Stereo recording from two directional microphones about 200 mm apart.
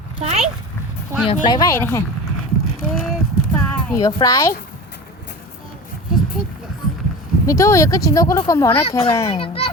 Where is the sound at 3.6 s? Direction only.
5° left (ahead or behind).